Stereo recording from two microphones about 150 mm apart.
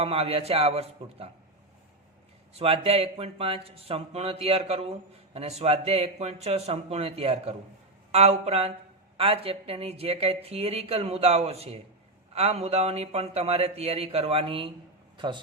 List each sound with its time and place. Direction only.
0.0 s speech: 40° right (ahead or behind)
2.5 s speech: 40° right (ahead or behind)